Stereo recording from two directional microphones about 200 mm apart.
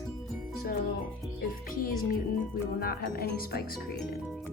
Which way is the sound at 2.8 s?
50° left (ahead or behind).